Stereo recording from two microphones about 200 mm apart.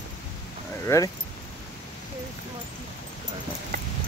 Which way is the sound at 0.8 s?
15° left (ahead or behind).